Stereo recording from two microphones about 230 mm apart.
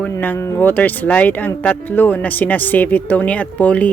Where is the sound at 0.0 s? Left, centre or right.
Centre.